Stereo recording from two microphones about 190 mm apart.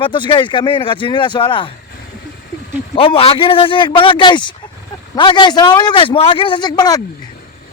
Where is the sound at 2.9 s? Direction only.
30° left (ahead or behind).